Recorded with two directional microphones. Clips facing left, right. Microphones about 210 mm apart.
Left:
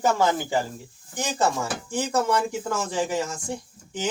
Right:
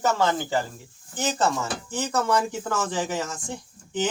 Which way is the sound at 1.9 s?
10° left (ahead or behind).